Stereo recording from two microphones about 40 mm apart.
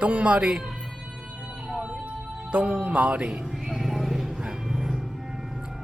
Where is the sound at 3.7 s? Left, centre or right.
Centre.